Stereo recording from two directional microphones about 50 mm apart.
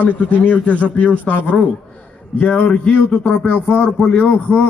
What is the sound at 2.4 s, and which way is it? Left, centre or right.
A man's voice, centre.